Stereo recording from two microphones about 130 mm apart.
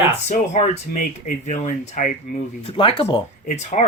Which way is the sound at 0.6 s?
80° left.